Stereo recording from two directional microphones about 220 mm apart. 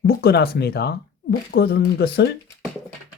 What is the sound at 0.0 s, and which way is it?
Speech, 45° left (ahead or behind).